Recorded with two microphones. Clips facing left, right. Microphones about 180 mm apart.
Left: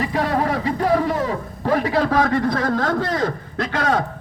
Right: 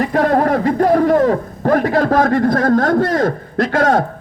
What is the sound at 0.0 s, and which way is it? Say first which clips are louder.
A man's voice: right 6 dB; 50° right (ahead or behind).